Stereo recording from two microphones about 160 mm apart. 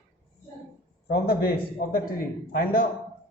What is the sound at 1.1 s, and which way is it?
Speech, 70° left (ahead or behind).